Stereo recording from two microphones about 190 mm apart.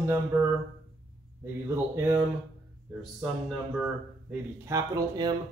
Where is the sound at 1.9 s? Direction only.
15° right (ahead or behind).